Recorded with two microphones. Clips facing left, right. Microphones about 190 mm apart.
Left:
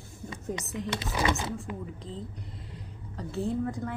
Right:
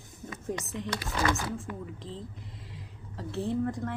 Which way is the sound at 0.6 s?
Centre (ahead or behind).